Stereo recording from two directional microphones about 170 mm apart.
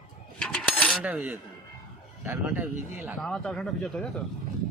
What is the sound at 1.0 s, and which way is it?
Speech, 5° right (ahead or behind).